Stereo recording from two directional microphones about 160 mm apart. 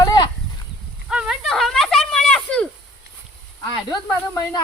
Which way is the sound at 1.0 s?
5° right (ahead or behind).